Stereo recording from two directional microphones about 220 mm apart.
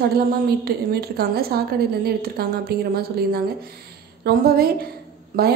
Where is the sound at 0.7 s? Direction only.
45° right (ahead or behind).